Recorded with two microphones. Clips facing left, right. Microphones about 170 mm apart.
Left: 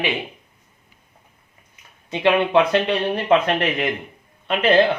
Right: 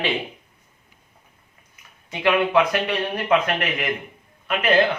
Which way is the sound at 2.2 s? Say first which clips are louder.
Left 2 dB; 25° left (ahead or behind).